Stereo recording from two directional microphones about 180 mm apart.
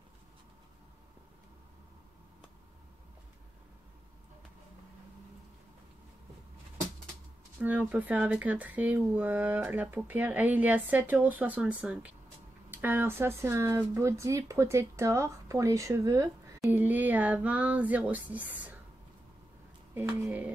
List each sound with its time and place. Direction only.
7.6 s speech: 10° right (ahead or behind)
19.9 s speech: 10° right (ahead or behind)